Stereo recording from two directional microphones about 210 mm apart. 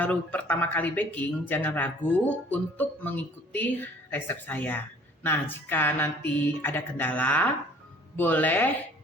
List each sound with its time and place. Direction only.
0.0 s speech: 5° left (ahead or behind)